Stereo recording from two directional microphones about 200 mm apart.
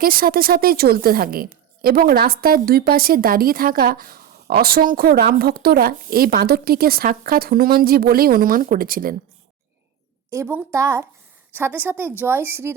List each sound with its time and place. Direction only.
0.0 s a woman's voice: 45° right (ahead or behind)
10.3 s speech: 10° right (ahead or behind)